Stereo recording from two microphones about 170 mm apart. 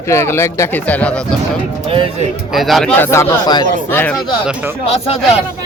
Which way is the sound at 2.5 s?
Centre (ahead or behind).